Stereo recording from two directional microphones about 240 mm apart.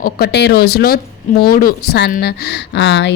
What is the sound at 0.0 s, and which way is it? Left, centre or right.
Speech, left.